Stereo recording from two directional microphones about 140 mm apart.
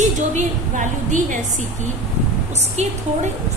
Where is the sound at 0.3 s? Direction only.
65° right (ahead or behind).